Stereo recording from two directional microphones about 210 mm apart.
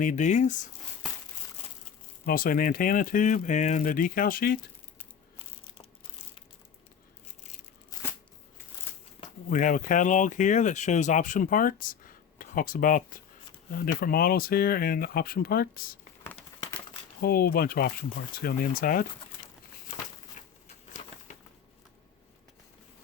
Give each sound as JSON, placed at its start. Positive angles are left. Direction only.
{"t": 0.0, "sound": "speech", "side_deg": 35}
{"t": 2.2, "sound": "speech", "side_deg": 40}
{"t": 9.5, "sound": "speech", "side_deg": 40}
{"t": 17.2, "sound": "speech", "side_deg": 45}
{"t": 20.4, "sound": "a sound", "side_deg": 35}